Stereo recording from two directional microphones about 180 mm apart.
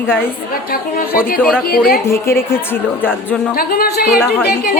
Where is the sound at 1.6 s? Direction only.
55° left (ahead or behind).